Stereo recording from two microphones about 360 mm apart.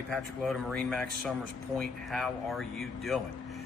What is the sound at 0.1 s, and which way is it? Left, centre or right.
Speech, centre.